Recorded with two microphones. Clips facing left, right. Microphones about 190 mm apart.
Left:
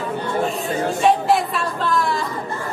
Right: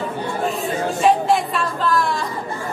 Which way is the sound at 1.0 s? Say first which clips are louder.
Right 1 dB; centre (ahead or behind).